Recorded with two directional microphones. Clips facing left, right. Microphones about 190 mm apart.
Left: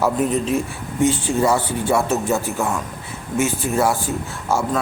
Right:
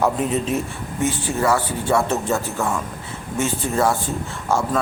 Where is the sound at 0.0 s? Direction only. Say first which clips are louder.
Left 1 dB; centre (ahead or behind).